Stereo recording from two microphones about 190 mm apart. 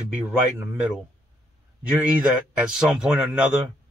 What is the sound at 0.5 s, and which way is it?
Speech, 10° right (ahead or behind).